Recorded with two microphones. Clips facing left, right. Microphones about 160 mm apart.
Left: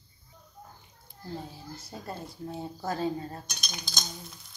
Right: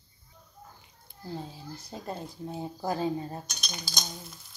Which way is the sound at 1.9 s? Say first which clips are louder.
Right 2 dB; 20° right (ahead or behind).